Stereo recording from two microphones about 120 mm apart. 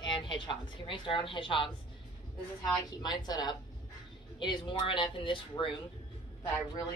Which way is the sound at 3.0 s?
35° left (ahead or behind).